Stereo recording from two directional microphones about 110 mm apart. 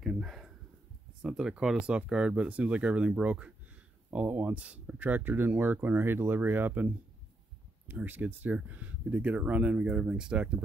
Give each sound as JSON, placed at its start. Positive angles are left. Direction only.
{"t": 0.0, "sound": "a sound", "side_deg": 0}
{"t": 1.2, "sound": "speech", "side_deg": -5}
{"t": 7.9, "sound": "speech", "side_deg": -15}